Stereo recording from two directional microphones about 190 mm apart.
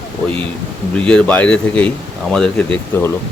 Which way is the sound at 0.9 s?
5° left (ahead or behind).